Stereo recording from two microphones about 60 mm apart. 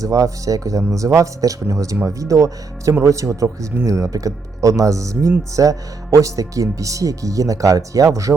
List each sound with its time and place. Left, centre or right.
0.0 s speech: right